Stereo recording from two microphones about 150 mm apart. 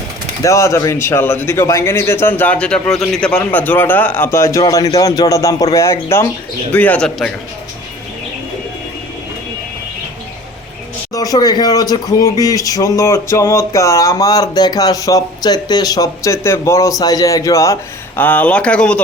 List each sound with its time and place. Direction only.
0.4 s speech: 20° left (ahead or behind)
11.1 s speech: 25° left (ahead or behind)
18.2 s speech: 10° left (ahead or behind)